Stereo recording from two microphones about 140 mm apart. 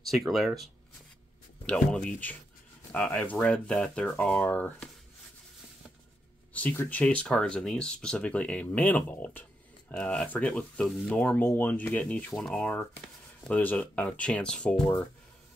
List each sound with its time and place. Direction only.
0.0 s speech: centre (ahead or behind)
1.7 s speech: 10° left (ahead or behind)
6.5 s speech: 10° left (ahead or behind)